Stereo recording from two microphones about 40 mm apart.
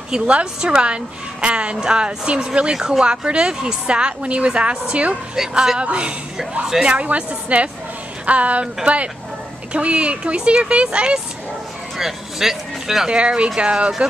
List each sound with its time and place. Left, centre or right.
0.1 s a woman's voice: right
5.3 s a woman's voice: centre
12.0 s speech: centre
13.1 s a woman's voice: right